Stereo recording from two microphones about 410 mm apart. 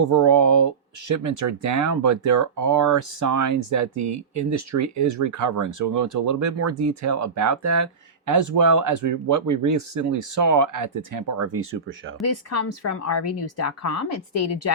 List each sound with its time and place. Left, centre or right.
0.0 s speech: right
12.2 s a woman's voice: left